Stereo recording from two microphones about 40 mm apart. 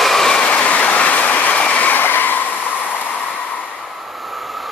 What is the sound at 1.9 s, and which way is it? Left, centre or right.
Train, left.